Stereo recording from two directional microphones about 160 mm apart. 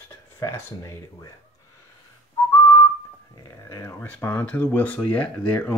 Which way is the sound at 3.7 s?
15° left (ahead or behind).